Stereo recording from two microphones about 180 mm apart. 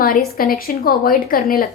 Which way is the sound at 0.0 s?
55° left (ahead or behind).